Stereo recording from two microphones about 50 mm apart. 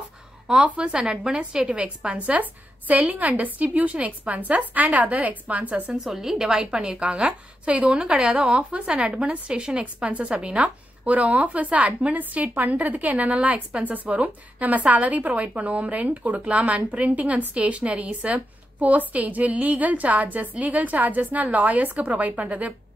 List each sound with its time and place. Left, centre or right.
0.7 s a woman's voice: right
5.9 s a woman's voice: centre; by 22.8 s right